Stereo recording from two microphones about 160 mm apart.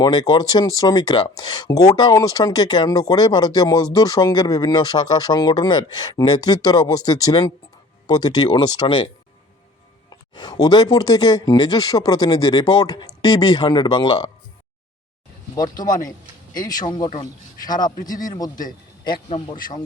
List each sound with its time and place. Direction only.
0.0 s speech: 25° left (ahead or behind)
10.1 s speech: 25° left (ahead or behind)
15.5 s speech: 25° left (ahead or behind)
19.3 s speech: 30° left (ahead or behind)